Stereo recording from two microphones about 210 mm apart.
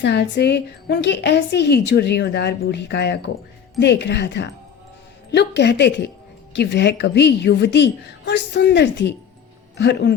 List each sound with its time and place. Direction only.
0.0 s a woman's voice: 55° left (ahead or behind)